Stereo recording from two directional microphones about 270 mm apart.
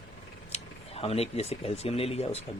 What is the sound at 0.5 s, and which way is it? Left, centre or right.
Speech, left.